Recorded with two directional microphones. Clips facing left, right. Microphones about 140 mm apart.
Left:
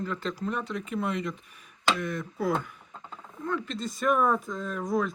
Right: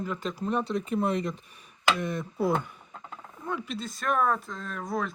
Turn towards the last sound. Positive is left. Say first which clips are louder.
# left 4 dB
turn(degrees=0)  # may be behind; listen again after turning